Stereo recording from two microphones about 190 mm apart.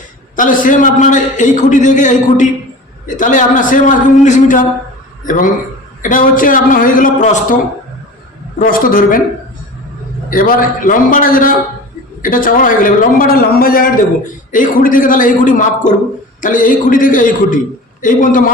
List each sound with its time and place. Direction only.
0.3 s a man's voice: 45° left (ahead or behind)
10.2 s a man's voice: 50° left (ahead or behind)